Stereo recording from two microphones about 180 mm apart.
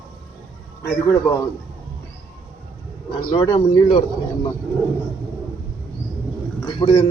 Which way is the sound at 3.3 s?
30° left (ahead or behind).